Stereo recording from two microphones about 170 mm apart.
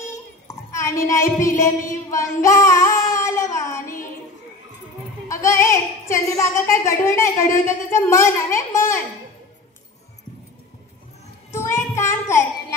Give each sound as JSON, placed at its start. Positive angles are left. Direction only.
{"t": 0.5, "sound": "a sound", "side_deg": 15}
{"t": 1.1, "sound": "speech", "side_deg": 20}
{"t": 1.6, "sound": "child singing", "side_deg": 20}
{"t": 5.3, "sound": "speech", "side_deg": 15}
{"t": 11.5, "sound": "child singing", "side_deg": 15}